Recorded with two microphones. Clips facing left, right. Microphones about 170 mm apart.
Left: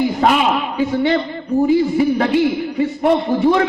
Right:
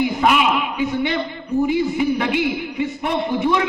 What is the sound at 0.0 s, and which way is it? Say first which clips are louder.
A man's voice: left 2 dB; 40° left (ahead or behind).